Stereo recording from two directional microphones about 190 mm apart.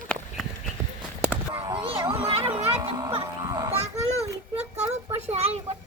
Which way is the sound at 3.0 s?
20° right (ahead or behind).